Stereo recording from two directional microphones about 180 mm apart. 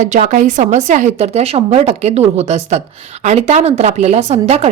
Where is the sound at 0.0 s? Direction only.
45° right (ahead or behind).